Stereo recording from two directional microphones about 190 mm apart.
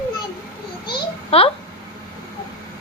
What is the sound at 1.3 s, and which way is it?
Speech, 30° left (ahead or behind).